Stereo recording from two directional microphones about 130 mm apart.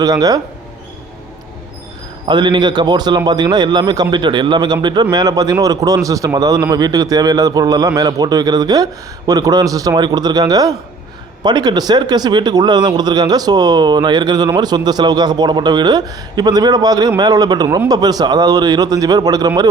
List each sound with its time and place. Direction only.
0.0 s a man's voice: 30° right (ahead or behind)
2.2 s a man's voice: 40° right (ahead or behind)